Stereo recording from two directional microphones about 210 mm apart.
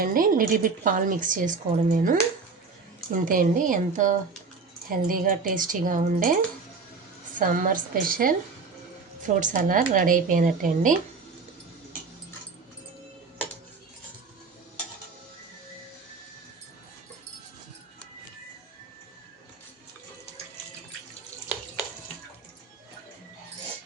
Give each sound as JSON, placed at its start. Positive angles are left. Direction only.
{"t": 0.0, "sound": "a woman's voice", "side_deg": -40}